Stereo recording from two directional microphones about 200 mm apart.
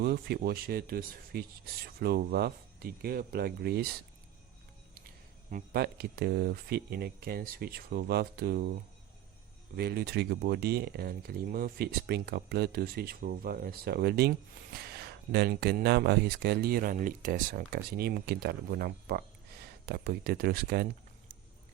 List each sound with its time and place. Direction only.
0.0 s speech: 55° right (ahead or behind)
5.5 s speech: 45° right (ahead or behind)
9.7 s speech: 50° right (ahead or behind)